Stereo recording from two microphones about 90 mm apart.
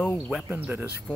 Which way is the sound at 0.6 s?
20° right (ahead or behind).